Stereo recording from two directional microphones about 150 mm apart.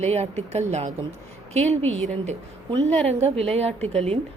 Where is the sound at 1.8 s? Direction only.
10° left (ahead or behind).